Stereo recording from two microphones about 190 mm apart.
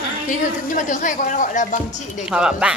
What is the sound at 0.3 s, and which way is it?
Speech, 45° left (ahead or behind).